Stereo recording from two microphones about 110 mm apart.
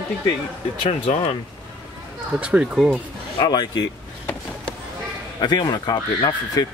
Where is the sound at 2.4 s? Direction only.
10° right (ahead or behind).